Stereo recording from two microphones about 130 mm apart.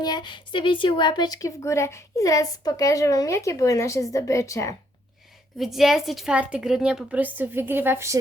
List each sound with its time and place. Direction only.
0.0 s a woman's voice: 35° left (ahead or behind)
5.5 s a woman's voice: centre (ahead or behind); by 8.1 s 20° right (ahead or behind)